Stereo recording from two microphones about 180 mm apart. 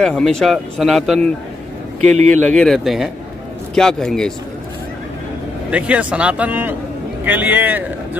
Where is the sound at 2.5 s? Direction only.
5° left (ahead or behind).